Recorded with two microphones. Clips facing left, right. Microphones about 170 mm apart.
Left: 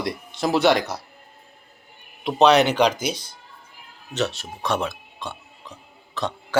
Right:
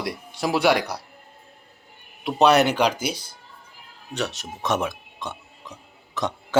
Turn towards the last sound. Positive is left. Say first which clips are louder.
# right 1 dB
turn(degrees=-20)  # may be behind; listen again after turning